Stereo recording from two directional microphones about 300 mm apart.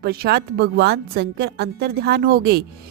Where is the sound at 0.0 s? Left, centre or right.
Right.